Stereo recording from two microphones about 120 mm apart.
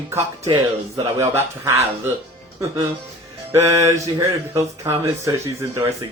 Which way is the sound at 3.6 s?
25° right (ahead or behind).